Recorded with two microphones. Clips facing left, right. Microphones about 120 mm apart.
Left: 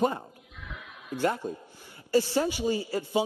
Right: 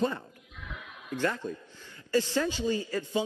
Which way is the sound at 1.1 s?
15° left (ahead or behind).